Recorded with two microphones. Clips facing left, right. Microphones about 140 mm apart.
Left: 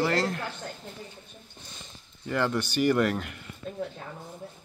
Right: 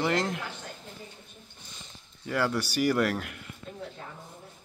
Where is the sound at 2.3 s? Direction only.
5° right (ahead or behind).